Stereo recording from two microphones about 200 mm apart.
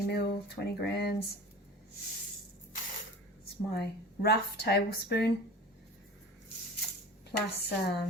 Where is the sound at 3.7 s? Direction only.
55° left (ahead or behind).